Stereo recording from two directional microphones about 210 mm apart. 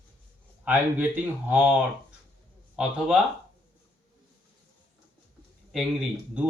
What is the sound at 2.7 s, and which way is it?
Speech, 5° right (ahead or behind).